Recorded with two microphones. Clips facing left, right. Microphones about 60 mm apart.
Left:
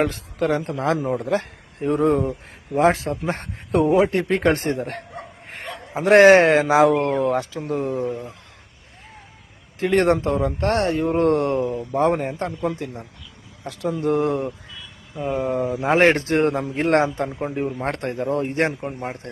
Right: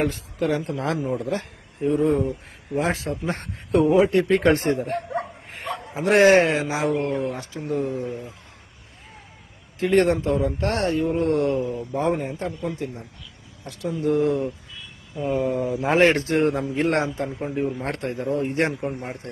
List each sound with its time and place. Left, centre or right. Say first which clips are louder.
0.0 s a man's voice: left 2 dB; left
1.3 s speech: left 5 dB; left
2.7 s a man's voice: left 6 dB; left
4.8 s a man's voice: right 4 dB; left
6.2 s speech: left 4 dB; left
7.7 s a man's voice: left 1 dB; left
9.8 s a man's voice: left 1 dB; left
11.7 s speech: left 2 dB; left
11.9 s a man's voice: left 4 dB; left
14.0 s a man's voice: even; left
15.9 s a man's voice: left 2 dB; left
17.9 s a man's voice: left 2 dB; left
18.7 s speech: right 2 dB; centre
18.9 s a man's voice: left 3 dB; left